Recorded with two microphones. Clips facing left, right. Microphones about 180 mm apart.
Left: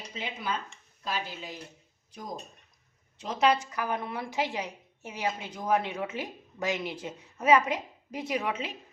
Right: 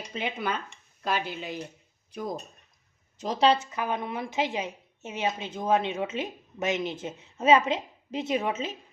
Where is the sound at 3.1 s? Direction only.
35° right (ahead or behind).